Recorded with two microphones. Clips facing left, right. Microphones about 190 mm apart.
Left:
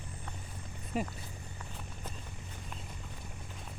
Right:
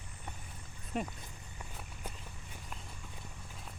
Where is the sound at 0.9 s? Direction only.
Centre (ahead or behind).